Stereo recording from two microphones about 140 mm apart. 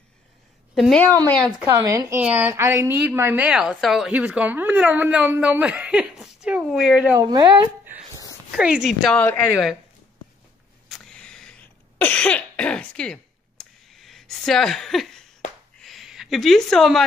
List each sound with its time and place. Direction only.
0.7 s speech: centre (ahead or behind)
1.9 s speech: 25° right (ahead or behind)
2.1 s speech: 10° right (ahead or behind)
7.2 s speech: 30° right (ahead or behind)
8.5 s speech: 5° right (ahead or behind)
9.1 s speech: 15° left (ahead or behind)
10.9 s cough: 5° left (ahead or behind)
15.8 s a sound: centre (ahead or behind)